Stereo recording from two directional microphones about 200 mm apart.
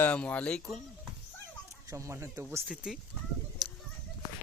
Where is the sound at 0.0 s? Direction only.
5° left (ahead or behind).